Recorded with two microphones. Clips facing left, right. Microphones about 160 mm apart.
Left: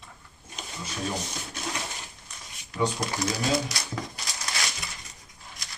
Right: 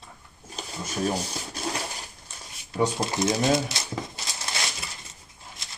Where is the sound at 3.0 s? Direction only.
25° right (ahead or behind).